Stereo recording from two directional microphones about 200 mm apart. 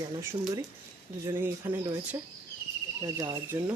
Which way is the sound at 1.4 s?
10° right (ahead or behind).